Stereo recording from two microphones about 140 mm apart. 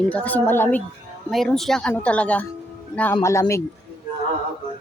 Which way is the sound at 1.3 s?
Centre (ahead or behind).